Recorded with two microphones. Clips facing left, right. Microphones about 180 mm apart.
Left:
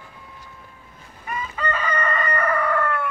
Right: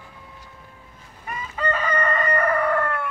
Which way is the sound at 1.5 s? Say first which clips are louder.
Right 3 dB; 40° right (ahead or behind).